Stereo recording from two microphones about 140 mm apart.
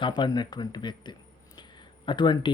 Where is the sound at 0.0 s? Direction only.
35° left (ahead or behind).